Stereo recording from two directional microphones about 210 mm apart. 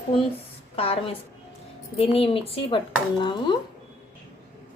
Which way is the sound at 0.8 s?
25° left (ahead or behind).